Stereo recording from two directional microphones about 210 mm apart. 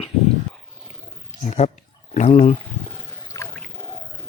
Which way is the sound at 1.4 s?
35° left (ahead or behind).